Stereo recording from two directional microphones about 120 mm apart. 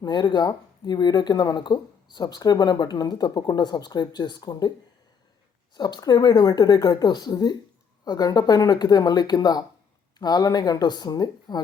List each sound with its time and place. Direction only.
0.0 s speech: 40° left (ahead or behind)
5.7 s speech: 35° left (ahead or behind)